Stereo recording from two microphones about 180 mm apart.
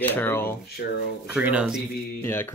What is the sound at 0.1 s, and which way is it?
Speech, 10° left (ahead or behind).